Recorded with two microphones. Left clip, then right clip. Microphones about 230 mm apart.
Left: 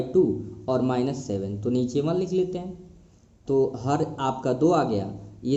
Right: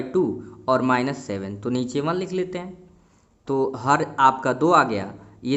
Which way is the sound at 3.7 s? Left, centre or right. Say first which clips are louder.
Right 6 dB; right.